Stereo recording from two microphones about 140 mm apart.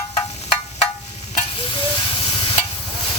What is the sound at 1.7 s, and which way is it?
Sizzle, 40° left (ahead or behind).